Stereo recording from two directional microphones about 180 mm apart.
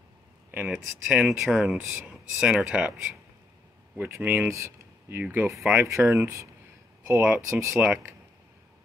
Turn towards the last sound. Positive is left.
turn(degrees=-10)  # may be behind; listen again after turning